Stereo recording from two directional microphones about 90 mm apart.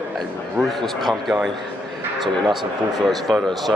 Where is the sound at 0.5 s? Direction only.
Centre (ahead or behind).